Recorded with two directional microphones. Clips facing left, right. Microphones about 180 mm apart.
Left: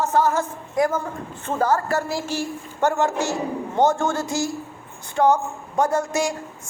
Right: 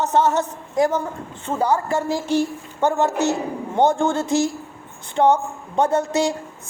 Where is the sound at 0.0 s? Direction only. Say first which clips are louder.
Right 2 dB; 20° right (ahead or behind).